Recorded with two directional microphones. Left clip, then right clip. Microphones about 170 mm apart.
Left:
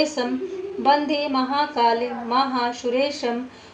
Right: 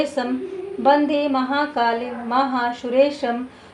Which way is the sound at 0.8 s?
30° right (ahead or behind).